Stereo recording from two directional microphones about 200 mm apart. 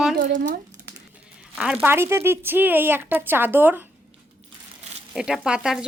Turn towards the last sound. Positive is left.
turn(degrees=0)  # may be behind; listen again after turning